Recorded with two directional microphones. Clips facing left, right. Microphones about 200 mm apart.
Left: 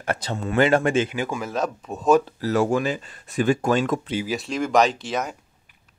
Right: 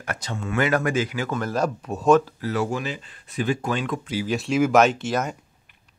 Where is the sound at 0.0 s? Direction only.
30° left (ahead or behind).